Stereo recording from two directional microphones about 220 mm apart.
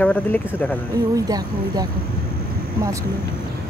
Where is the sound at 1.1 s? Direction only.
15° right (ahead or behind).